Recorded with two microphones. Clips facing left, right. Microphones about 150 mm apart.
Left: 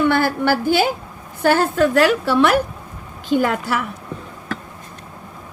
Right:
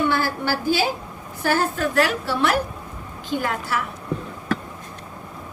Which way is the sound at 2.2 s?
90° left.